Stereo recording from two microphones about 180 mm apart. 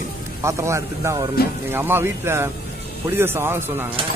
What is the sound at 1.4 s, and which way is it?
Speech, 60° left (ahead or behind).